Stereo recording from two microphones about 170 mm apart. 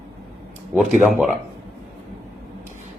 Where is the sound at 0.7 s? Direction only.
5° right (ahead or behind).